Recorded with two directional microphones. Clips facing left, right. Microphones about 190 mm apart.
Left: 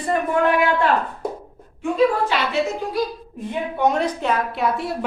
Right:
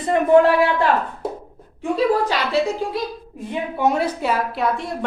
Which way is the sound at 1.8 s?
35° right (ahead or behind).